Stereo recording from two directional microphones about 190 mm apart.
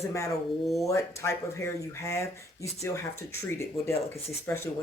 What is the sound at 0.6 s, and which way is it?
Speech, centre (ahead or behind).